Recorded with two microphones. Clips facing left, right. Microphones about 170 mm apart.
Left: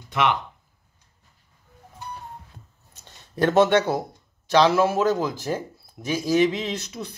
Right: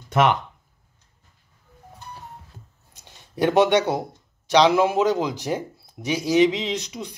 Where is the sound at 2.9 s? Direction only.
10° right (ahead or behind).